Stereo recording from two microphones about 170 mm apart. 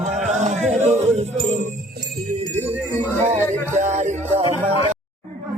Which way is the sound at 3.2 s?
40° right (ahead or behind).